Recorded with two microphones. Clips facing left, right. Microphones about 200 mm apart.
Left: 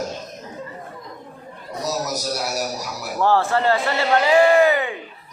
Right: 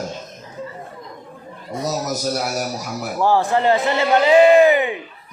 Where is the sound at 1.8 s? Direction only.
50° right (ahead or behind).